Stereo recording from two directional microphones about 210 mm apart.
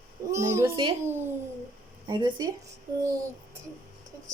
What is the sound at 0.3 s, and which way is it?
Speech, 15° right (ahead or behind).